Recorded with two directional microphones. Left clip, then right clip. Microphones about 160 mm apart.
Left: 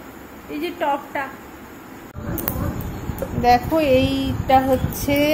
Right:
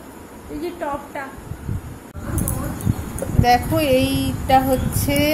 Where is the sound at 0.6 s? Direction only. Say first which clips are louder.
Left 4 dB; 20° left (ahead or behind).